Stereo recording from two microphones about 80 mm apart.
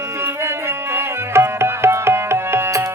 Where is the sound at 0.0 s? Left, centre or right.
Right.